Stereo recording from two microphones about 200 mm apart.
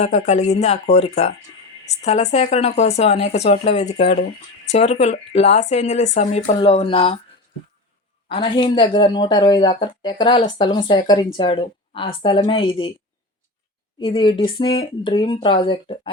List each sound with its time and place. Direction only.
0.0 s speech: 35° left (ahead or behind)
8.3 s speech: 25° left (ahead or behind)
14.0 s speech: 25° left (ahead or behind)